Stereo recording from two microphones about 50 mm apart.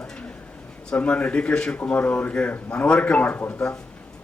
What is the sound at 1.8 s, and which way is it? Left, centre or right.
Speech, left.